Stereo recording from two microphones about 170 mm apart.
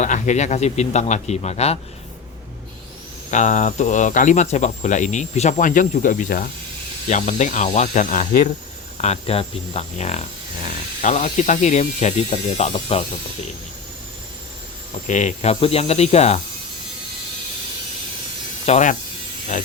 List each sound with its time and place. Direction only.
0.0 s speech: 45° left (ahead or behind)
3.3 s speech: 45° left (ahead or behind)
9.0 s speech: 35° left (ahead or behind)
15.0 s speech: 45° left (ahead or behind)
18.6 s speech: 40° left (ahead or behind)